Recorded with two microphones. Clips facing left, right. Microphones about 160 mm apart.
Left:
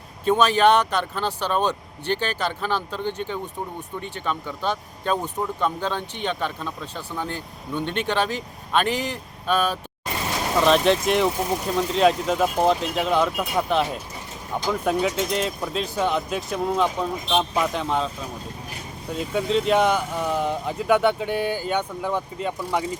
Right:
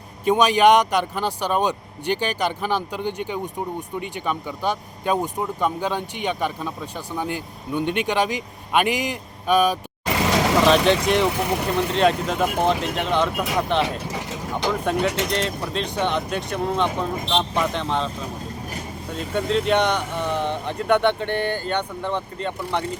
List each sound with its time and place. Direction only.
0.3 s speech: 15° right (ahead or behind)
10.1 s vehicle: 90° right
10.9 s speech: centre (ahead or behind)
11.3 s speech: 70° right (ahead or behind)
11.9 s speech: centre (ahead or behind)
14.1 s vehicle: 90° right
15.3 s speech: 5° left (ahead or behind)
19.1 s speech: 5° left (ahead or behind)